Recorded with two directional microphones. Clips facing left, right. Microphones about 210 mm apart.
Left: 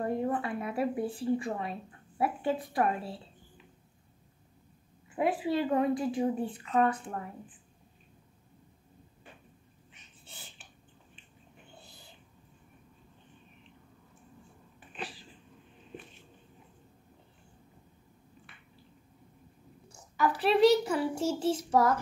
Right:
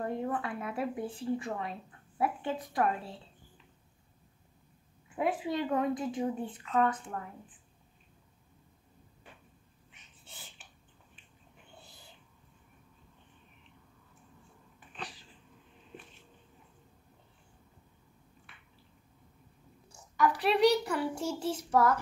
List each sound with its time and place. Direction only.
0.0 s a woman's voice: 10° left (ahead or behind)
5.1 s a woman's voice: 5° left (ahead or behind)
14.9 s cat: 5° left (ahead or behind)
20.4 s child singing: 25° left (ahead or behind)